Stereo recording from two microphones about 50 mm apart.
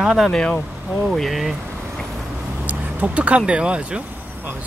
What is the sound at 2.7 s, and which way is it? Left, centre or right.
Speech, right.